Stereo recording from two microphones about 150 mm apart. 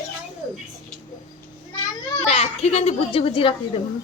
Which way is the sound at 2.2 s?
40° left (ahead or behind).